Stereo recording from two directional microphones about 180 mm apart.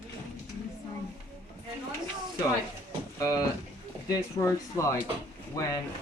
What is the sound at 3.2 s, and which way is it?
Speech, 20° left (ahead or behind).